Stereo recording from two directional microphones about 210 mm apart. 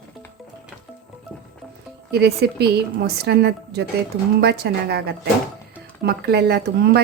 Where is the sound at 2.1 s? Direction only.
50° right (ahead or behind).